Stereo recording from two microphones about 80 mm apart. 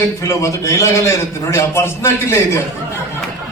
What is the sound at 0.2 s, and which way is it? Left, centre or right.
A man's voice, left.